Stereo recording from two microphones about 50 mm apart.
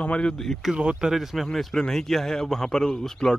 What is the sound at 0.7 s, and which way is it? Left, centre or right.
Speech, right.